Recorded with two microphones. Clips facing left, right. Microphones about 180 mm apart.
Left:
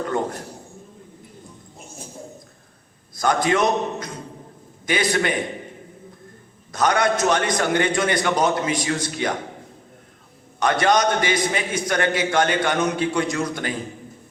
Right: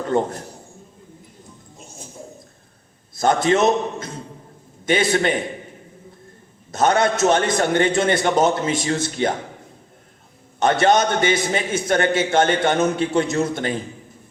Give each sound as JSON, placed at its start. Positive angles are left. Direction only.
{"t": 0.1, "sound": "a man's voice", "side_deg": -25}
{"t": 3.2, "sound": "a man's voice", "side_deg": -25}
{"t": 6.7, "sound": "a man's voice", "side_deg": -25}
{"t": 10.6, "sound": "a man's voice", "side_deg": -25}